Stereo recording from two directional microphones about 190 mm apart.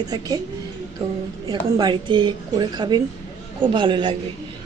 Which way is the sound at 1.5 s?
25° right (ahead or behind).